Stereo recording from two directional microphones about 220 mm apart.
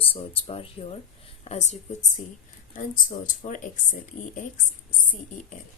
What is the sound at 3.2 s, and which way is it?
Speech, 40° left (ahead or behind).